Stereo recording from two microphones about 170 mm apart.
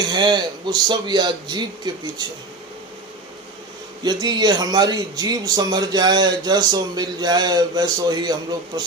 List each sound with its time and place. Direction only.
0.0 s speech: 25° right (ahead or behind)
4.0 s speech: 25° right (ahead or behind)